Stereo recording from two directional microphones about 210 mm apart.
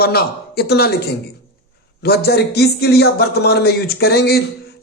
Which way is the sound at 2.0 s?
50° left (ahead or behind).